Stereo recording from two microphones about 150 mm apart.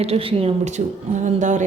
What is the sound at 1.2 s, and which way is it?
Speech, 55° right (ahead or behind).